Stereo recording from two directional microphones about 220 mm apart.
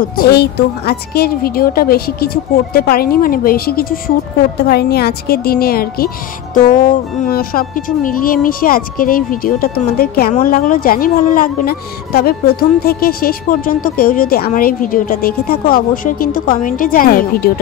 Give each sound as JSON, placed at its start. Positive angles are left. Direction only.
{"t": 0.2, "sound": "a woman's voice", "side_deg": 45}